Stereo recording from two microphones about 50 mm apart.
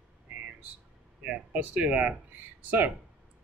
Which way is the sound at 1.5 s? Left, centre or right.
Right.